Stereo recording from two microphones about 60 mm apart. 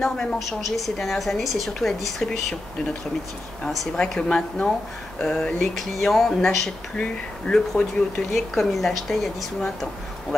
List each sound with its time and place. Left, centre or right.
0.0 s a woman's voice: centre
3.6 s speech: centre
5.8 s a woman's voice: centre
7.0 s speech: centre
7.7 s a woman's voice: centre